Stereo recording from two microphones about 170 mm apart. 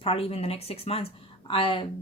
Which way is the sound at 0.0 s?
35° left (ahead or behind).